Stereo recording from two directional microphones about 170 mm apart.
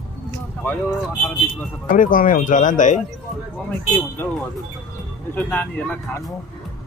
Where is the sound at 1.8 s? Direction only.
50° left (ahead or behind).